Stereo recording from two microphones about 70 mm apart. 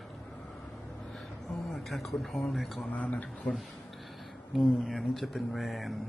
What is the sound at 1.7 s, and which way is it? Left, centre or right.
Speech, centre.